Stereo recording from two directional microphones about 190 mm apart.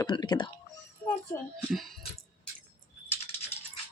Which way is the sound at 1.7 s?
Centre (ahead or behind).